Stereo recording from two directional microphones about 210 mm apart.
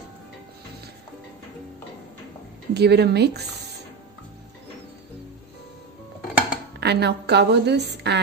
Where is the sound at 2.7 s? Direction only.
50° right (ahead or behind).